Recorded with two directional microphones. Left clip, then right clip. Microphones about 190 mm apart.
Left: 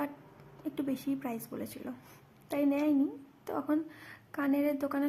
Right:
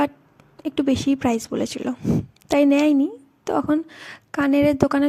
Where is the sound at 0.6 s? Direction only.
45° right (ahead or behind).